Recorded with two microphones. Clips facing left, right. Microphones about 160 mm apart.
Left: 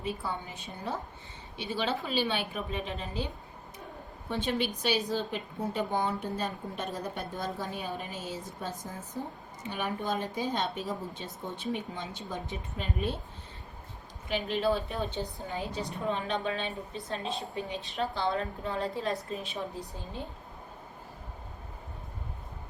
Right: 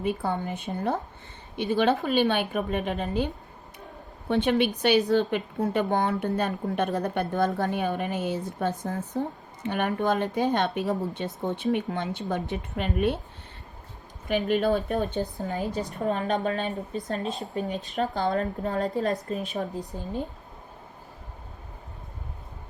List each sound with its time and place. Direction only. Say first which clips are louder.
0.0 s speech: right 7 dB; 55° right (ahead or behind)
4.3 s speech: right 8 dB; 65° right (ahead or behind)
14.3 s a woman's voice: right 5 dB; 55° right (ahead or behind)